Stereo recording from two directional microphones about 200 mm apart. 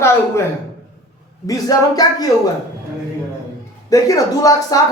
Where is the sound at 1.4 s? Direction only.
15° left (ahead or behind).